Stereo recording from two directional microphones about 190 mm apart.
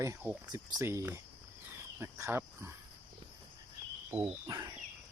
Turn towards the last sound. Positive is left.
turn(degrees=-20)  # may be behind; listen again after turning